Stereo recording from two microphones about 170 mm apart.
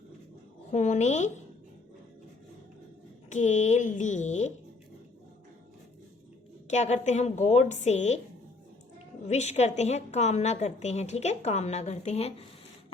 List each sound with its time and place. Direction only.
0.7 s speech: 45° left (ahead or behind)
3.2 s speech: 45° left (ahead or behind)
6.7 s speech: 40° left (ahead or behind)
9.2 s a woman's voice: 40° left (ahead or behind)